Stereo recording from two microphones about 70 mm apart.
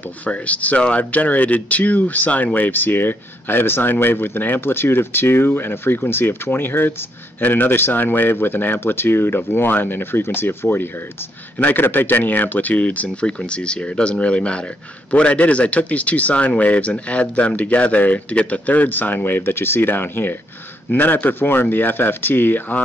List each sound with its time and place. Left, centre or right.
0.2 s a man's voice: left